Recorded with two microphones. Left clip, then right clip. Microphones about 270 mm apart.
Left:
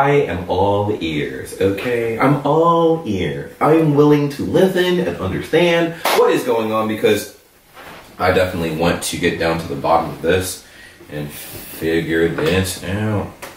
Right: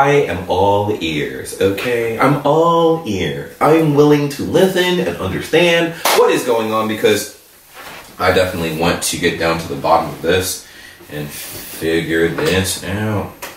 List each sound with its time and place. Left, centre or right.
0.0 s speech: centre
0.5 s a sound: left
0.9 s speech: centre
2.2 s a sound: left
3.2 s speech: centre
3.7 s speech: centre
6.9 s speech: centre
8.4 s speech: centre
9.6 s a sound: centre
11.8 s speech: centre